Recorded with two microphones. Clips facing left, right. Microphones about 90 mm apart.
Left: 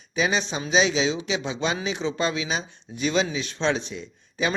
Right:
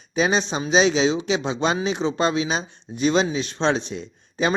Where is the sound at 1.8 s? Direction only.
25° right (ahead or behind).